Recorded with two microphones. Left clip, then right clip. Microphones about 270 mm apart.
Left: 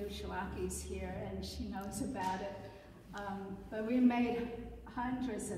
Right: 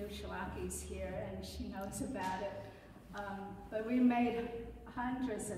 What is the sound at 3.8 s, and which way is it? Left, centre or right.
A woman's voice, centre.